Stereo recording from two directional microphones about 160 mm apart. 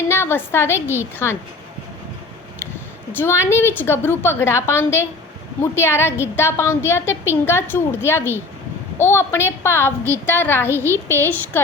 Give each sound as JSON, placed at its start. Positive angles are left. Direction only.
{"t": 0.1, "sound": "a woman's voice", "side_deg": 15}
{"t": 3.1, "sound": "a woman's voice", "side_deg": 15}